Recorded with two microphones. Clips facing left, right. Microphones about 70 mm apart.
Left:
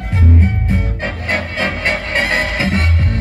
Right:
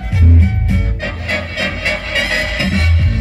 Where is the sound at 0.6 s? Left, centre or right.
Left.